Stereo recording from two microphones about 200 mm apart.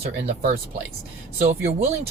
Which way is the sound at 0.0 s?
30° right (ahead or behind).